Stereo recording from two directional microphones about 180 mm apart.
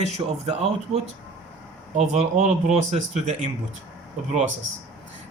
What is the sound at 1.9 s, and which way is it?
Speech, 40° right (ahead or behind).